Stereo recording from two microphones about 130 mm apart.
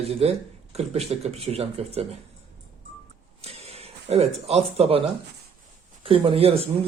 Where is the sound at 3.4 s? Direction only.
50° right (ahead or behind).